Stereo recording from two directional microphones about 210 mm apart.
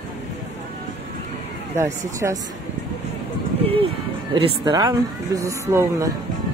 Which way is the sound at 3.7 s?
25° right (ahead or behind).